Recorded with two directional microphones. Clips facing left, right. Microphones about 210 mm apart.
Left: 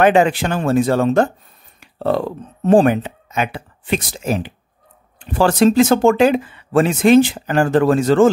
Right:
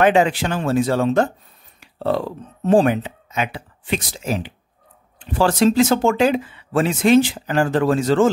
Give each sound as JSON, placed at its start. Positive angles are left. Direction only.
{"t": 0.0, "sound": "speech", "side_deg": 55}